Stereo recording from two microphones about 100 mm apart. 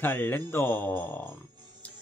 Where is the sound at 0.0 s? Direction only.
20° left (ahead or behind).